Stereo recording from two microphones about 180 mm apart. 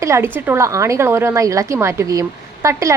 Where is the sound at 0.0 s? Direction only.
15° right (ahead or behind).